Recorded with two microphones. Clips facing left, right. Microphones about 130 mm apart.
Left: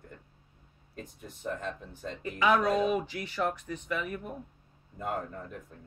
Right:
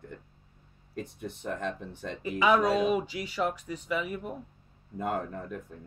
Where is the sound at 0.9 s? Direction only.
80° right.